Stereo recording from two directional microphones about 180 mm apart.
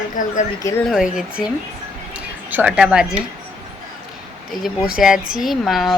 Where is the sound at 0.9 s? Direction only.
5° right (ahead or behind).